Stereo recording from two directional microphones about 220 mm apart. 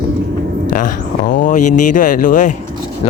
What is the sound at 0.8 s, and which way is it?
Speech, 40° left (ahead or behind).